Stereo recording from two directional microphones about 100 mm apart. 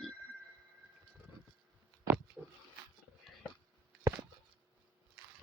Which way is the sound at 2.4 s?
5° right (ahead or behind).